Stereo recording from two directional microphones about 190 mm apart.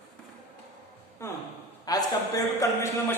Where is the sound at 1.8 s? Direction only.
20° left (ahead or behind).